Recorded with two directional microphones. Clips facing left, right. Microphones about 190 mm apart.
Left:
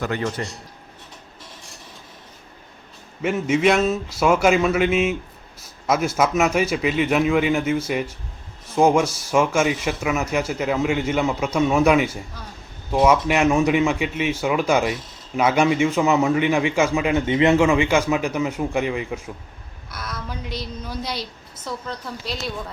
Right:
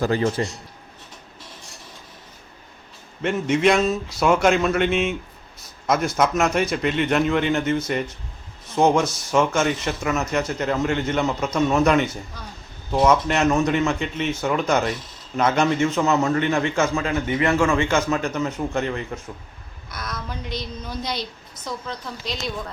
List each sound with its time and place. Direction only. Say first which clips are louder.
0.0 s a man's voice: right 4 dB; 30° right (ahead or behind)
3.2 s a man's voice: left 1 dB; 5° left (ahead or behind)